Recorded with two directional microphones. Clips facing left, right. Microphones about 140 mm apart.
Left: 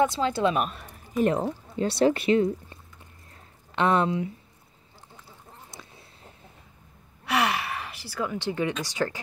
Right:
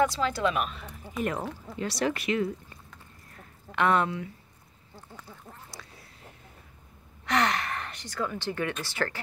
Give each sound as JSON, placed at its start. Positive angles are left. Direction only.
{"t": 0.0, "sound": "speech", "side_deg": 25}
{"t": 3.7, "sound": "speech", "side_deg": 20}
{"t": 7.2, "sound": "gasp", "side_deg": 10}
{"t": 8.8, "sound": "speech", "side_deg": 15}